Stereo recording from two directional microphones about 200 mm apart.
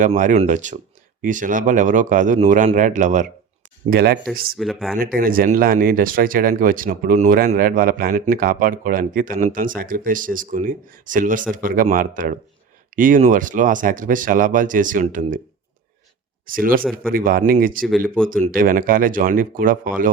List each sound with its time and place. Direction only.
0.0 s speech: 40° right (ahead or behind)
3.8 s speech: 50° right (ahead or behind)
4.5 s speech: centre (ahead or behind)
4.9 s speech: 45° right (ahead or behind)
16.5 s speech: 45° right (ahead or behind)